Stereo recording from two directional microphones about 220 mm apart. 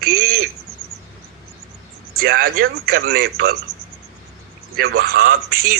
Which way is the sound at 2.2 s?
45° right (ahead or behind).